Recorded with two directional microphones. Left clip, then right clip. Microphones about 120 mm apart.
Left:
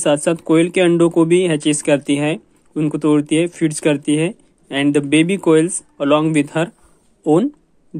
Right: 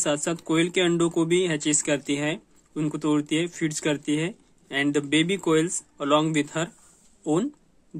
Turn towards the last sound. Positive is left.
turn(degrees=45)  # may be behind; listen again after turning